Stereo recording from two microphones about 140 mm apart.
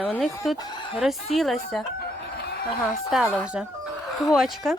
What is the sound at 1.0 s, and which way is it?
Speech, centre (ahead or behind).